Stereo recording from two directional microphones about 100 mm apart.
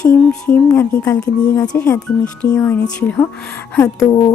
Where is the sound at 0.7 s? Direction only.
25° left (ahead or behind).